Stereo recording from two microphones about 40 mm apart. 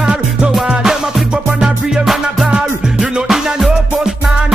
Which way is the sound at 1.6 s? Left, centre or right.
Centre.